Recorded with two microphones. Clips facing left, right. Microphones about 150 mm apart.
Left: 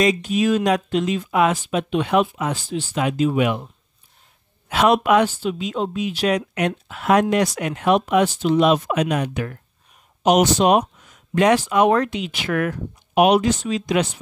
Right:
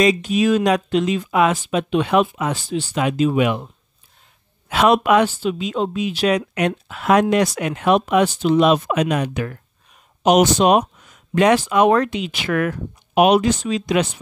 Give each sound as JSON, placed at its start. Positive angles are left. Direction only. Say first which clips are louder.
{"t": 0.0, "sound": "speech", "louder": "right 2 dB", "side_deg": -90}
{"t": 4.6, "sound": "speech", "louder": "right 1 dB", "side_deg": -90}